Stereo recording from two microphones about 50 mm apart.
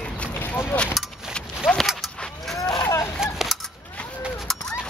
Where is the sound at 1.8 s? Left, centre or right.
Centre.